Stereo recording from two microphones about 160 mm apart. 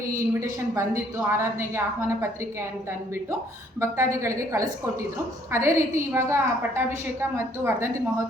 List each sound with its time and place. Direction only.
0.3 s a woman's voice: 20° right (ahead or behind)
3.8 s a woman's voice: 15° right (ahead or behind)